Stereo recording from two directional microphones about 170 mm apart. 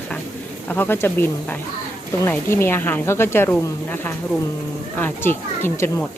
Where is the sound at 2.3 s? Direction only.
15° left (ahead or behind).